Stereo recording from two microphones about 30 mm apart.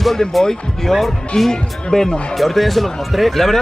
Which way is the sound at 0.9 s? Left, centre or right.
Centre.